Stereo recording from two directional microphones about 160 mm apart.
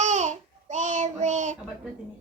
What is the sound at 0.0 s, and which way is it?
Child singing, 45° right (ahead or behind).